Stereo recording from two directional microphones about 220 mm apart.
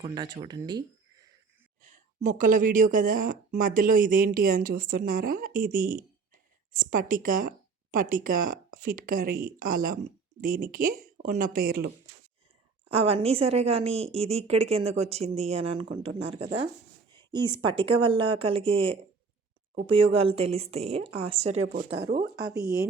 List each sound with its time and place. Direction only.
0.0 s speech: 20° right (ahead or behind)
1.8 s speech: 35° right (ahead or behind)
12.9 s a woman's voice: 25° right (ahead or behind); by 22.9 s 45° right (ahead or behind)